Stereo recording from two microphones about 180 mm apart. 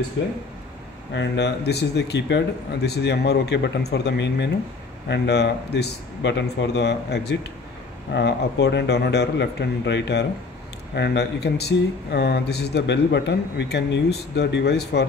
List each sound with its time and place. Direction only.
1.1 s speech: 80° left
11.0 s speech: 70° left (ahead or behind)